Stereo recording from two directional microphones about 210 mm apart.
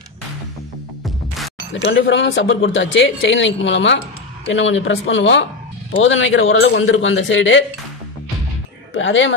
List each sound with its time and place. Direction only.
1.9 s speech: 60° left (ahead or behind)
8.9 s speech: 65° left (ahead or behind)